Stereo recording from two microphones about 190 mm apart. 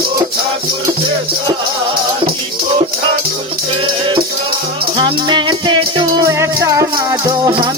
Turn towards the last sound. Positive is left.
turn(degrees=-20)  # may be behind; listen again after turning